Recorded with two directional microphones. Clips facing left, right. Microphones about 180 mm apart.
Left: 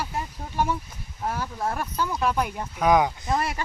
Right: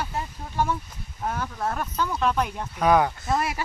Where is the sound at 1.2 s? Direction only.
5° left (ahead or behind).